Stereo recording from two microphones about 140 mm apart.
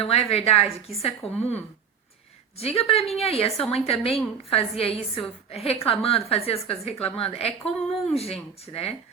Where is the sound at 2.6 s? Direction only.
45° left (ahead or behind).